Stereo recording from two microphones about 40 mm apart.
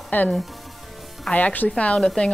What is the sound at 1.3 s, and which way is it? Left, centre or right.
Speech, left.